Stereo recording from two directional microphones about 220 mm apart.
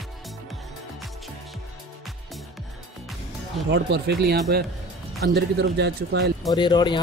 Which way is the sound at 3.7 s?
50° right (ahead or behind).